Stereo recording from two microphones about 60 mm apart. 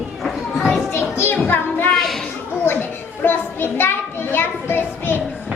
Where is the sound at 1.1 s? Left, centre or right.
Left.